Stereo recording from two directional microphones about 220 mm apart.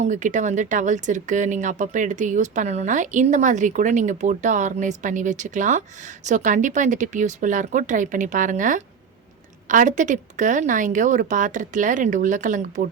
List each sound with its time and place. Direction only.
0.0 s speech: 35° right (ahead or behind)